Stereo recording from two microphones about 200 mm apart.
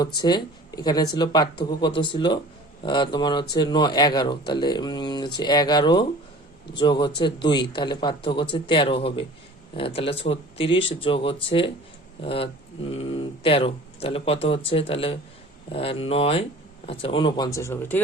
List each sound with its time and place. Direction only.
0.2 s speech: 20° left (ahead or behind)